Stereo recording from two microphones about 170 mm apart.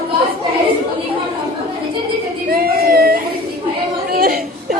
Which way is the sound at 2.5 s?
60° right (ahead or behind).